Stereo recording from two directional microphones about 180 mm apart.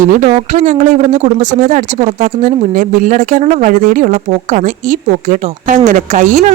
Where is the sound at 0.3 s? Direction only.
40° right (ahead or behind).